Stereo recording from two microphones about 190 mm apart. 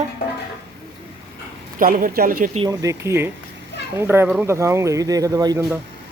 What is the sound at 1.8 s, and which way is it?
Speech, 45° right (ahead or behind).